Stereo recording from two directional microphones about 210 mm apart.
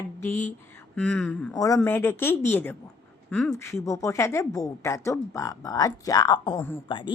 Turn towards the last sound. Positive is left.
turn(degrees=20)  # may be behind; listen again after turning